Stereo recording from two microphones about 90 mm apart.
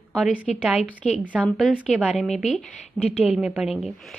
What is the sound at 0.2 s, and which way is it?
Speech, 15° right (ahead or behind).